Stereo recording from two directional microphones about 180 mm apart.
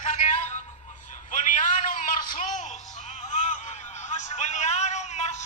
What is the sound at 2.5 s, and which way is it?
Music, 40° left (ahead or behind).